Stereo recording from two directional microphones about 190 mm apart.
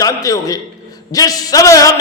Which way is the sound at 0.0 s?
20° left (ahead or behind).